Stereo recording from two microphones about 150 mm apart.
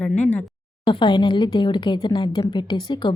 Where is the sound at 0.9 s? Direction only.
30° left (ahead or behind).